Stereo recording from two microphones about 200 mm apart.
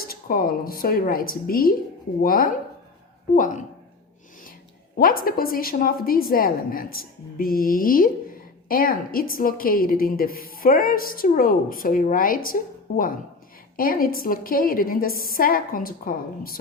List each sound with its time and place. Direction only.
0.1 s a woman's voice: 45° left (ahead or behind)
4.9 s a woman's voice: 45° left (ahead or behind)